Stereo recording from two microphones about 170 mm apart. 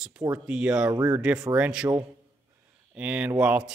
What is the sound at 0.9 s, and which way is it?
Speech, 20° right (ahead or behind).